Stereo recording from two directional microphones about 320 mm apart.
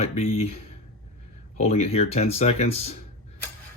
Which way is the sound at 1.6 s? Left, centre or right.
Centre.